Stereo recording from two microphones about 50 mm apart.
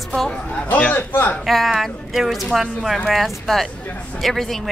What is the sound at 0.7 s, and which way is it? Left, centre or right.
Speech, left.